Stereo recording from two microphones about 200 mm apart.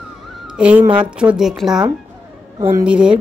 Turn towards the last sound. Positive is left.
turn(degrees=-5)  # may be behind; listen again after turning